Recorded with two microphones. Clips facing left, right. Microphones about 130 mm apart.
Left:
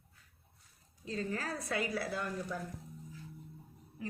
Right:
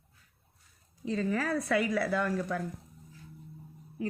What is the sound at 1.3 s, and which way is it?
A woman's voice, 90° right.